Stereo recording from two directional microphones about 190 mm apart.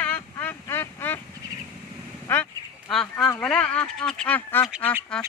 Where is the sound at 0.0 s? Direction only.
10° left (ahead or behind).